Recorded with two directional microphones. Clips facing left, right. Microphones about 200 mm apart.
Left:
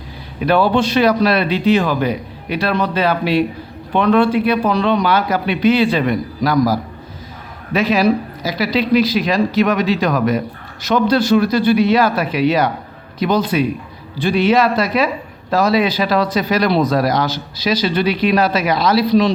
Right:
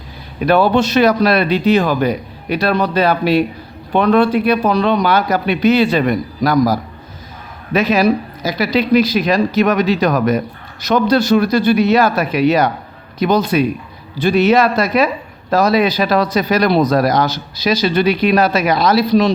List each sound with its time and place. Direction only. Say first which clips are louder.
0.3 s speech: right 2 dB; 45° right (ahead or behind)